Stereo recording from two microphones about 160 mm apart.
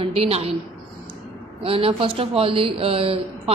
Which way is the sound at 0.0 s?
35° right (ahead or behind).